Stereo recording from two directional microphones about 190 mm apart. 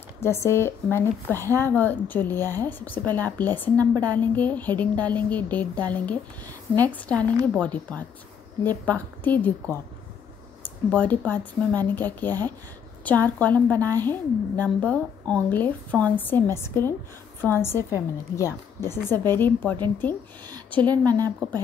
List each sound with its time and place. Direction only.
0.2 s speech: 15° left (ahead or behind)
21.0 s speech: 20° right (ahead or behind)